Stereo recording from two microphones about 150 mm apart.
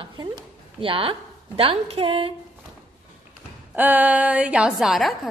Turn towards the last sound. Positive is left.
turn(degrees=0)  # may be behind; listen again after turning